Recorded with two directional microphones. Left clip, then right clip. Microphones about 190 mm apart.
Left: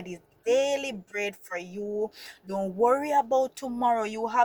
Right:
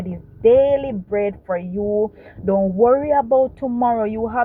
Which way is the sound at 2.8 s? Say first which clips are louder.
Right 7 dB; 40° left (ahead or behind).